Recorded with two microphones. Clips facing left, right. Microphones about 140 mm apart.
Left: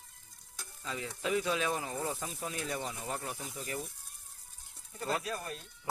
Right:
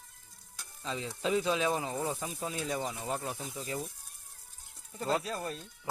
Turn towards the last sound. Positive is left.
turn(degrees=-30)  # may be behind; listen again after turning